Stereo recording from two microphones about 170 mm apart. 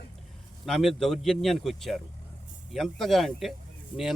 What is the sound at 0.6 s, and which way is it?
Speech, centre (ahead or behind).